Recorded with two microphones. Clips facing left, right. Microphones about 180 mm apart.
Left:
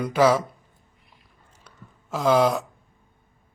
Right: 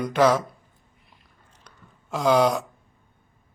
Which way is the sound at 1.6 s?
Centre (ahead or behind).